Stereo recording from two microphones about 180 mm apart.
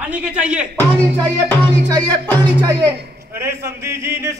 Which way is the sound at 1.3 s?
10° left (ahead or behind).